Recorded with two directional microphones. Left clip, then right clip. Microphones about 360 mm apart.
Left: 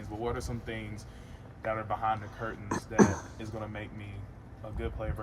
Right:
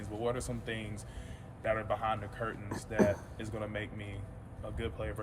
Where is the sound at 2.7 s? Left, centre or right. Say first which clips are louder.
Left 4 dB; left.